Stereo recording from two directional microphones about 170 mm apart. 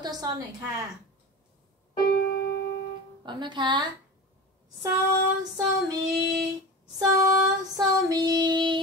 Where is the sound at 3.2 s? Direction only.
25° right (ahead or behind).